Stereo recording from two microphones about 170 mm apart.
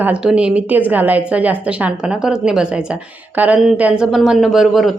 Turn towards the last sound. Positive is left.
turn(degrees=0)  # may be behind; listen again after turning